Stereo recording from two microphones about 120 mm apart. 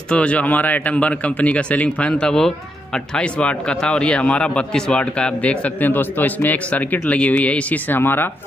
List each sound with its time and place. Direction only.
0.1 s speech: 10° left (ahead or behind)